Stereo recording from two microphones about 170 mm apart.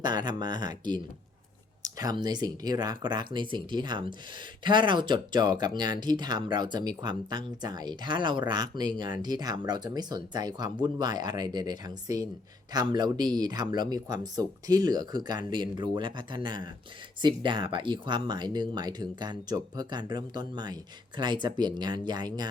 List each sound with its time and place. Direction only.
0.0 s speech: 25° right (ahead or behind)